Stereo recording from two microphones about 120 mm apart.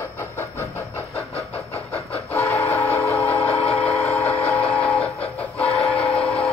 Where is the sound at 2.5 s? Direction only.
15° left (ahead or behind).